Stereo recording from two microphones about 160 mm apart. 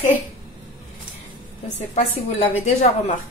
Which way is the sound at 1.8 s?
45° left (ahead or behind).